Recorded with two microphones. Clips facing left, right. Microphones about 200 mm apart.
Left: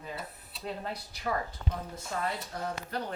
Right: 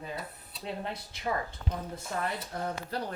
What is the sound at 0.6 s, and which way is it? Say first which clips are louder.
Speech: even; 25° right (ahead or behind).